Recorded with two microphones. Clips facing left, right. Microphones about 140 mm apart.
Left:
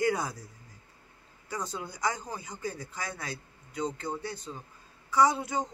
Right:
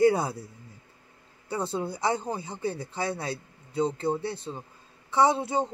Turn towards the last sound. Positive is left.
turn(degrees=-30)  # may be behind; listen again after turning